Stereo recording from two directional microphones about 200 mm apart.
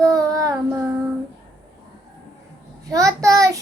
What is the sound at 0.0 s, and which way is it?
Child singing, 15° right (ahead or behind).